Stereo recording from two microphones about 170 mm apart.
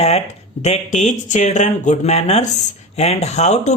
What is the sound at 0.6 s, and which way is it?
Speech, 45° left (ahead or behind).